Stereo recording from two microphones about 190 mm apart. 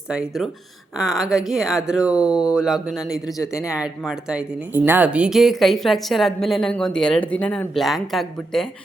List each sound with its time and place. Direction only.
0.1 s speech: 5° right (ahead or behind)
3.3 s speech: 15° left (ahead or behind)
3.8 s speech: 5° right (ahead or behind)